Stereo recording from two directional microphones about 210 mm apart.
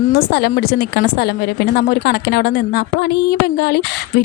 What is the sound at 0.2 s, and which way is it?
Speech, 50° left (ahead or behind).